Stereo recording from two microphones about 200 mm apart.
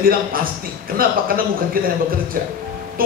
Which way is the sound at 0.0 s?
45° right (ahead or behind).